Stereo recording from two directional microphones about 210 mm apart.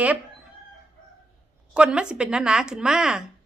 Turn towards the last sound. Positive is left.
turn(degrees=-5)  # may be behind; listen again after turning